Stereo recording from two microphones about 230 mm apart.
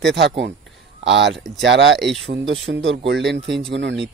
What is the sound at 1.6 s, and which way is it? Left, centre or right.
A man's voice, right.